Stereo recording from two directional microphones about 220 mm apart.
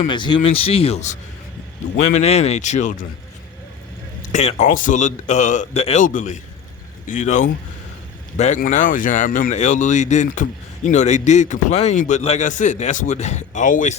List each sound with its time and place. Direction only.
0.1 s speech: 20° left (ahead or behind)
4.3 s speech: 35° left (ahead or behind)